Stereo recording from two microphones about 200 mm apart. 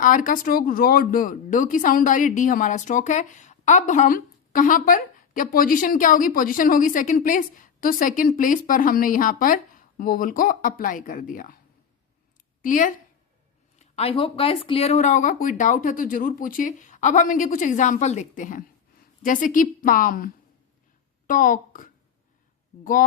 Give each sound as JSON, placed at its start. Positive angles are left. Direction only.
{"t": 0.0, "sound": "speech", "side_deg": 40}
{"t": 12.6, "sound": "speech", "side_deg": 40}